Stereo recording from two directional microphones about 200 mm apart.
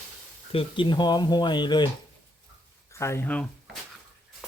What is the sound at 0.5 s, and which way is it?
Speech, 25° left (ahead or behind).